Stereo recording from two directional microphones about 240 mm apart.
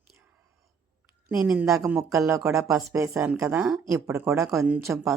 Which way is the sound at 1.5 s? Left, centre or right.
Centre.